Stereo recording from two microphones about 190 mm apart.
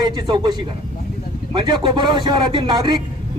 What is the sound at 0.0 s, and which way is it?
A man's voice, 25° right (ahead or behind).